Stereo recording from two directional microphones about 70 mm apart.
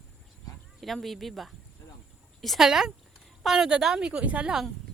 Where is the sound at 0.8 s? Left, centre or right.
Centre.